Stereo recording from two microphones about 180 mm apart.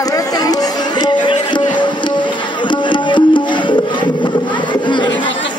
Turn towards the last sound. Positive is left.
turn(degrees=25)  # may be behind; listen again after turning